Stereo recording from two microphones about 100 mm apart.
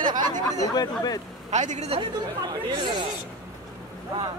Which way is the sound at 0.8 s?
40° left (ahead or behind).